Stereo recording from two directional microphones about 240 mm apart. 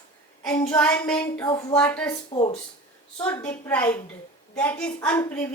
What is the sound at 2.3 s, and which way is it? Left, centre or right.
Speech, left.